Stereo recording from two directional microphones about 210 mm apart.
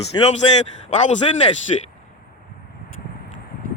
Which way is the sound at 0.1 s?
20° left (ahead or behind).